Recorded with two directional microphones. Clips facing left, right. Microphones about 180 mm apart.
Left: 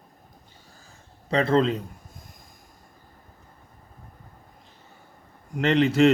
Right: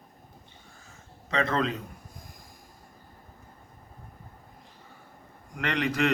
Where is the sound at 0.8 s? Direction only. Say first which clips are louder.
Even; 35° left (ahead or behind).